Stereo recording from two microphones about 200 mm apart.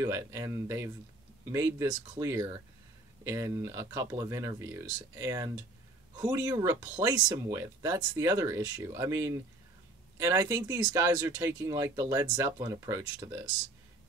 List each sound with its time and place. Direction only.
0.0 s speech: 15° right (ahead or behind)